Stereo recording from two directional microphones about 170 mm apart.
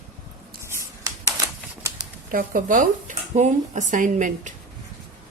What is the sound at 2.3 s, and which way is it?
Speech, 55° right (ahead or behind).